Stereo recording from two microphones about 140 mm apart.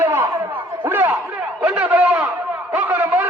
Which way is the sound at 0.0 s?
15° right (ahead or behind).